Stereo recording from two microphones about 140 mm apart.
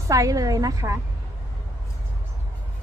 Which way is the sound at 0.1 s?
25° right (ahead or behind).